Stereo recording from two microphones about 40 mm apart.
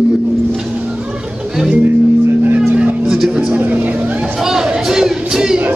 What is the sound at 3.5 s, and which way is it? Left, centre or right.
Speech, right.